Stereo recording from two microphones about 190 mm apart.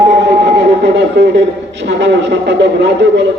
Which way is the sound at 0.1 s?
65° right (ahead or behind).